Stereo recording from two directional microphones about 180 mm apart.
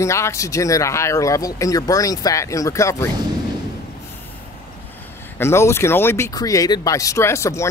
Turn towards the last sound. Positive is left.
turn(degrees=15)  # may be behind; listen again after turning